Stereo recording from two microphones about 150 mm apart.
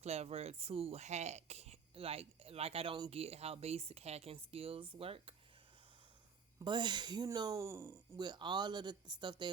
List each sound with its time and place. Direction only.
0.0 s speech: 45° right (ahead or behind)
6.7 s speech: 30° right (ahead or behind)